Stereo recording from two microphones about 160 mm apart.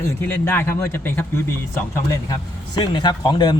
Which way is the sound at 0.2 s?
10° left (ahead or behind).